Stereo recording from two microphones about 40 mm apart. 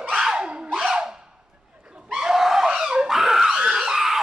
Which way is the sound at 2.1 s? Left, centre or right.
Centre.